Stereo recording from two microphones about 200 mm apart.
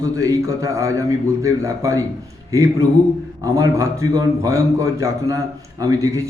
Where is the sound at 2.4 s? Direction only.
15° right (ahead or behind).